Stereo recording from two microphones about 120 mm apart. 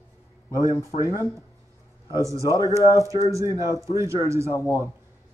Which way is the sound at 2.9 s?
25° right (ahead or behind).